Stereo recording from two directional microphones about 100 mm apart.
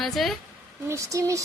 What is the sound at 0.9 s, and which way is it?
Speech, 30° right (ahead or behind).